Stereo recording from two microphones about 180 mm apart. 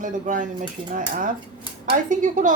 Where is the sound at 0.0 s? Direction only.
45° right (ahead or behind).